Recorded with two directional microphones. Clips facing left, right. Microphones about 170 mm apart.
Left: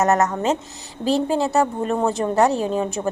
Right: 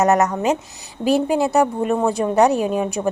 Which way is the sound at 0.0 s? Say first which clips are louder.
Right 2 dB; 15° right (ahead or behind).